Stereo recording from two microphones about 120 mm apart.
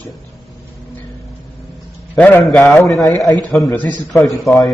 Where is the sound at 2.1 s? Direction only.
15° left (ahead or behind).